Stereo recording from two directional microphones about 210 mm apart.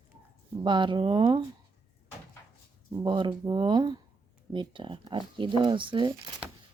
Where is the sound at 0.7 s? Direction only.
20° right (ahead or behind).